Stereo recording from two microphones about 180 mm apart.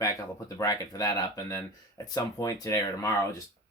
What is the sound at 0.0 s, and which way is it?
Speech, 20° left (ahead or behind).